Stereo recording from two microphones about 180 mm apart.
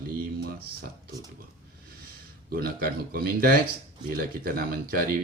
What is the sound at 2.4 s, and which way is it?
Speech, 55° right (ahead or behind).